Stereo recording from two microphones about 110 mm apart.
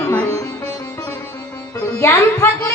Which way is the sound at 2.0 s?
25° left (ahead or behind).